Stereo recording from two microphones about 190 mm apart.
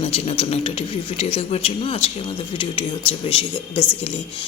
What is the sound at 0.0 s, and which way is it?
Speech, 30° left (ahead or behind).